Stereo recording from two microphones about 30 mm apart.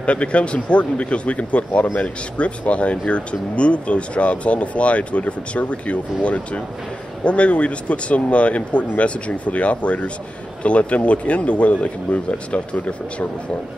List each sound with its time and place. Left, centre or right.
0.0 s speech: left